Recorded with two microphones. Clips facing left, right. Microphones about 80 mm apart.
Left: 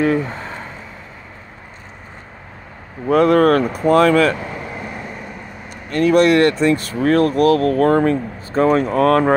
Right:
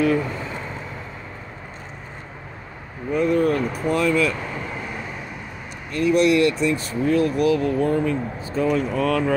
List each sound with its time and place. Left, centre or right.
3.1 s speech: left
5.9 s speech: left
6.6 s speech: left